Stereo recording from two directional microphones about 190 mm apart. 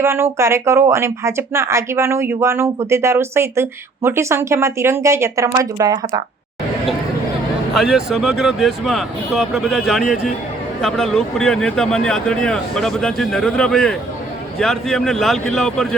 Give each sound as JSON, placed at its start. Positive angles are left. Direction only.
{"t": 0.0, "sound": "speech", "side_deg": -15}
{"t": 7.7, "sound": "speech", "side_deg": 0}